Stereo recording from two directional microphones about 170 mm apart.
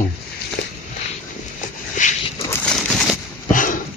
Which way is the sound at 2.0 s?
50° left (ahead or behind).